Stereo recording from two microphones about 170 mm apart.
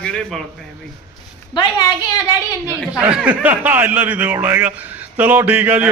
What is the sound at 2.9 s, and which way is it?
A man's voice, 5° right (ahead or behind).